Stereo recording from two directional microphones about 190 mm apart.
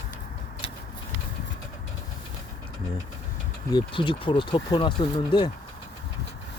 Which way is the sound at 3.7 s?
25° left (ahead or behind).